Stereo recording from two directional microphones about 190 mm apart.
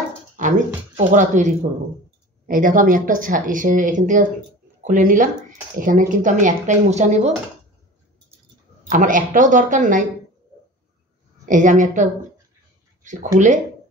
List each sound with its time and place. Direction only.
0.4 s speech: 40° right (ahead or behind)
8.8 s speech: 45° right (ahead or behind)
11.4 s speech: 40° right (ahead or behind)